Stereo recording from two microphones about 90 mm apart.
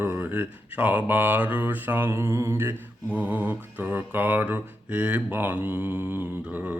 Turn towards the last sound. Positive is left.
turn(degrees=-20)  # may be behind; listen again after turning